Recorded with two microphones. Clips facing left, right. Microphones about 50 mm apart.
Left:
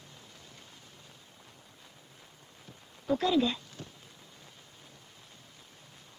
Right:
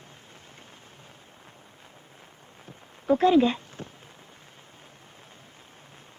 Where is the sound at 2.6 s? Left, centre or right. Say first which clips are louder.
Right 7 dB; right.